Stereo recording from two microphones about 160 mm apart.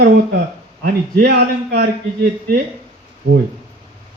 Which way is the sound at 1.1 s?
85° right.